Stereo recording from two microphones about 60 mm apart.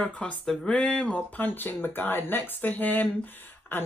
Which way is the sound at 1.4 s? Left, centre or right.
Left.